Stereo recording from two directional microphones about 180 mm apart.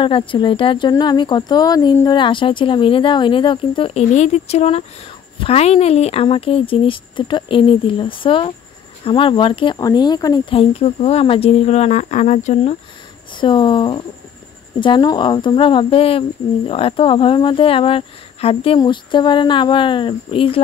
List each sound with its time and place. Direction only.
0.0 s speech: 30° left (ahead or behind)
13.3 s speech: 25° left (ahead or behind)